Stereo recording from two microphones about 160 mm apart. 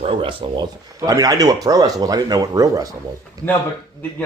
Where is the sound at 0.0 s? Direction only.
35° right (ahead or behind).